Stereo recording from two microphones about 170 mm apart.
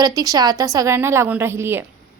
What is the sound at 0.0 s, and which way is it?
A woman's voice, 25° right (ahead or behind).